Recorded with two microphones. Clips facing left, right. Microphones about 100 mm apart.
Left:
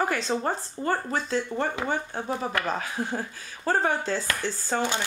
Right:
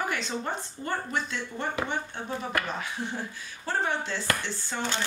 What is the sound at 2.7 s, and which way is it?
Speech, 40° left (ahead or behind).